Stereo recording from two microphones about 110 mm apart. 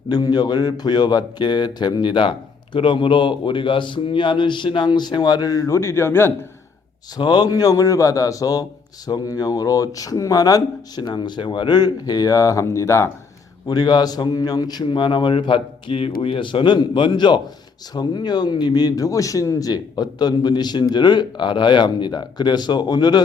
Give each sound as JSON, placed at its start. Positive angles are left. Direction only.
{"t": 0.1, "sound": "a man's voice", "side_deg": 40}
{"t": 7.2, "sound": "speech", "side_deg": 40}
{"t": 13.7, "sound": "a man's voice", "side_deg": 40}